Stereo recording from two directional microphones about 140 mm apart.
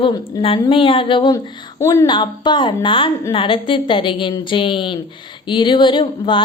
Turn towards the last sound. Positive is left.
turn(degrees=35)  # may be behind; listen again after turning